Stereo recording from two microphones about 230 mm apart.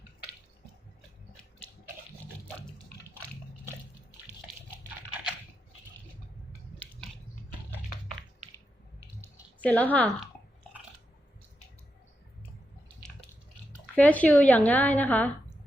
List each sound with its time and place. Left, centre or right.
9.6 s a woman's voice: centre
13.9 s a woman's voice: centre